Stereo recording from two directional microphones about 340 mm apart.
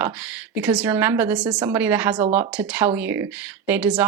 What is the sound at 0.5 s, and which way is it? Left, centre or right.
Speech, centre.